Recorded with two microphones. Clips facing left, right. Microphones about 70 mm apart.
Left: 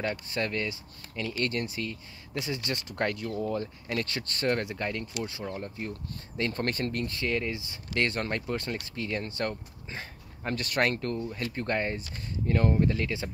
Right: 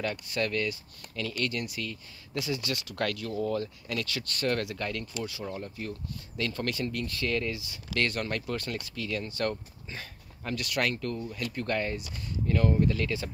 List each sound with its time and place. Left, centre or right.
0.1 s speech: left
1.4 s speech: left
3.3 s speech: centre
3.8 s speech: left